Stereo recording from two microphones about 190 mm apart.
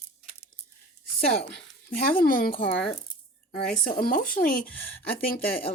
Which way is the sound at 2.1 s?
50° left (ahead or behind).